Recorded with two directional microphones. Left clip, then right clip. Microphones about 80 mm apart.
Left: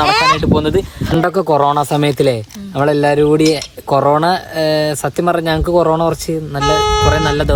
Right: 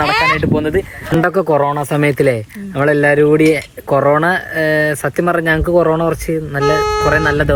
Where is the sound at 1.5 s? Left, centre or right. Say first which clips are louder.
Left 2 dB; left.